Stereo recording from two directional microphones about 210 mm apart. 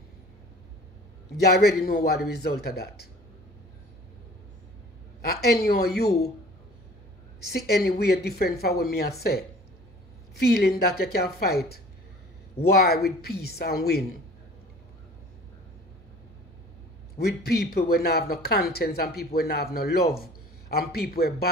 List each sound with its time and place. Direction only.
1.3 s speech: 50° left (ahead or behind)
5.2 s speech: 50° left (ahead or behind)
7.4 s speech: 50° left (ahead or behind)
10.5 s speech: 50° left (ahead or behind)
17.2 s speech: 50° left (ahead or behind)